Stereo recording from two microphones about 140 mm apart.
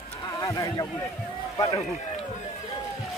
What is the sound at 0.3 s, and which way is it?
Speech, 20° left (ahead or behind).